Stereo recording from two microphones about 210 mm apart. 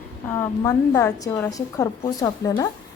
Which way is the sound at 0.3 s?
15° left (ahead or behind).